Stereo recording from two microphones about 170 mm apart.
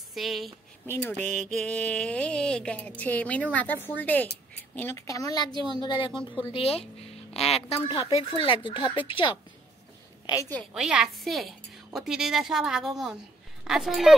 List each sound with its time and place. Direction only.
0.1 s speech: centre (ahead or behind)
0.8 s a sound: 10° left (ahead or behind)
4.7 s a woman's voice: 15° left (ahead or behind); by 9.3 s 30° left (ahead or behind)
10.7 s a woman's voice: 5° right (ahead or behind)